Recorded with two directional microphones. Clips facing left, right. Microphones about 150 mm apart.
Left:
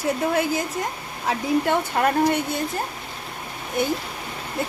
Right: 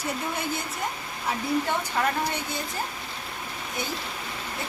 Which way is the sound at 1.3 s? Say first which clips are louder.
Left 5 dB; 60° left (ahead or behind).